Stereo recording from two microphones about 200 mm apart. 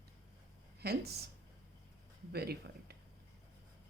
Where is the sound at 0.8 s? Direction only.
55° right (ahead or behind).